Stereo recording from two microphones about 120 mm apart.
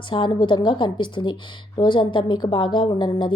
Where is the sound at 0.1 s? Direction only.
40° left (ahead or behind).